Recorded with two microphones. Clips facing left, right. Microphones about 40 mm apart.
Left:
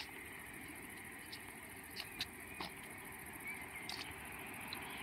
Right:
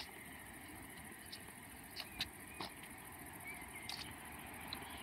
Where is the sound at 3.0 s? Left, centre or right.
Centre.